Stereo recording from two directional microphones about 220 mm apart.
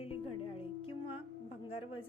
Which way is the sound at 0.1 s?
25° left (ahead or behind).